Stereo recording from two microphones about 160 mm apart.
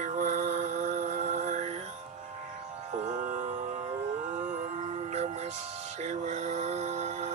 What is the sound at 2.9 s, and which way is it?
Music, 50° right (ahead or behind).